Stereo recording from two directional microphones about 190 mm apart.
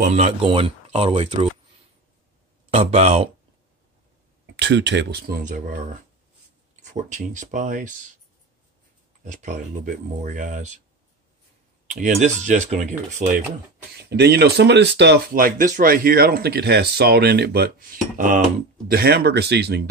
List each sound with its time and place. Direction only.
0.0 s speech: 35° right (ahead or behind)
2.7 s speech: 35° right (ahead or behind)
4.6 s speech: 65° right (ahead or behind); by 5.8 s 45° right (ahead or behind)
6.9 s speech: 40° right (ahead or behind)
9.2 s speech: 40° right (ahead or behind)
11.9 s speech: 40° right (ahead or behind)
14.0 s speech: 60° right (ahead or behind); by 18.4 s 45° right (ahead or behind)
18.9 s speech: 55° right (ahead or behind)